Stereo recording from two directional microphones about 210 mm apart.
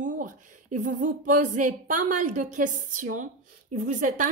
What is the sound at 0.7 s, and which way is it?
A woman's voice, 35° right (ahead or behind).